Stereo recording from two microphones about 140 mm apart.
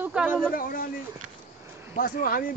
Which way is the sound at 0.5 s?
90° left.